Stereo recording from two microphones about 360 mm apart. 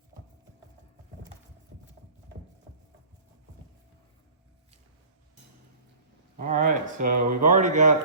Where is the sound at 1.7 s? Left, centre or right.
Right.